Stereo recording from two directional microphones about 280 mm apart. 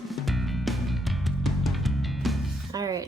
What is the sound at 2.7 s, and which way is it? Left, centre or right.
Speech, centre.